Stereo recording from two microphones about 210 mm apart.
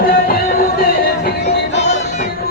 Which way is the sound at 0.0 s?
45° left (ahead or behind).